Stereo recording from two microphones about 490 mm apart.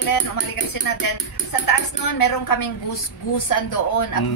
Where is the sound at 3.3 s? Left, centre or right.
Left.